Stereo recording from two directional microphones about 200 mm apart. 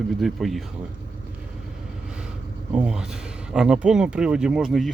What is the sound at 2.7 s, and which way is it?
Speech, 5° right (ahead or behind).